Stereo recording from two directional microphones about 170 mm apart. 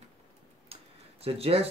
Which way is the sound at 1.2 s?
35° right (ahead or behind).